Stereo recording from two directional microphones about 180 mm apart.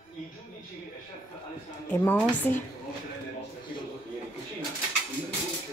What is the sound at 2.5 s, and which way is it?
Speech, 10° left (ahead or behind).